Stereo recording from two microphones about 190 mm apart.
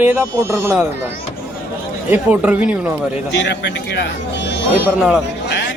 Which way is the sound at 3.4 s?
70° left (ahead or behind).